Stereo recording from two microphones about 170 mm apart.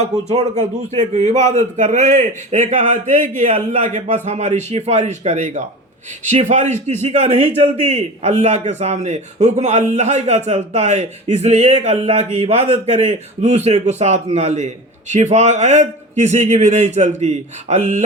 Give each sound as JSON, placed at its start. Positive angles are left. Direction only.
{"t": 0.0, "sound": "mantra", "side_deg": -40}
{"t": 1.1, "sound": "a man's voice", "side_deg": -45}
{"t": 17.2, "sound": "mantra", "side_deg": -40}